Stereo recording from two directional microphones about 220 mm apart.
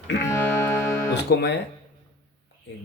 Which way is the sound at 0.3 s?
10° left (ahead or behind).